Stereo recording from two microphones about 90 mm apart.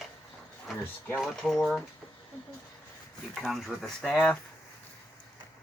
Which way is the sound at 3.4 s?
Centre (ahead or behind).